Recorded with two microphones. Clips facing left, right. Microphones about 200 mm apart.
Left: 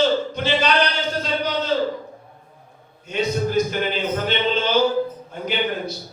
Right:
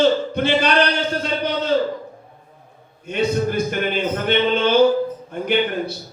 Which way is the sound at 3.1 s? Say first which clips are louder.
Right 1 dB; 55° right (ahead or behind).